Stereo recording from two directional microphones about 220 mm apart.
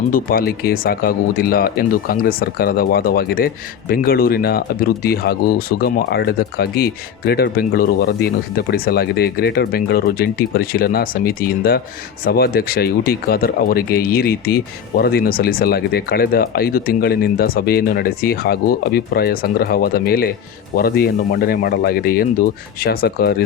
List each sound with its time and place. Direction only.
0.1 s speech: 40° left (ahead or behind)